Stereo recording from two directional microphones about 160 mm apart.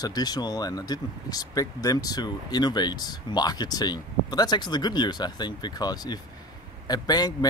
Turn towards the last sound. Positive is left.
turn(degrees=25)  # may be behind; listen again after turning